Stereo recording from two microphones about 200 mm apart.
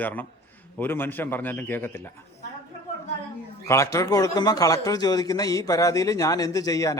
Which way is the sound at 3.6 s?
15° left (ahead or behind).